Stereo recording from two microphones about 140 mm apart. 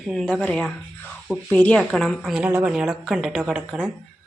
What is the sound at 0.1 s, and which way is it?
Speech, centre (ahead or behind).